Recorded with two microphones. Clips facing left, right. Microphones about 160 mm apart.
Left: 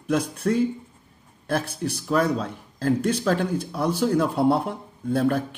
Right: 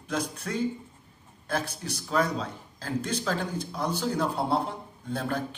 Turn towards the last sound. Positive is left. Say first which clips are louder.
# left 9 dB
turn(degrees=55)  # may be behind; listen again after turning